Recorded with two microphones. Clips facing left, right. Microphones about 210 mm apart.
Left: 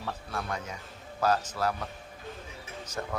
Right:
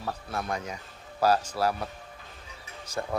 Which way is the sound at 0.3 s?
40° right (ahead or behind).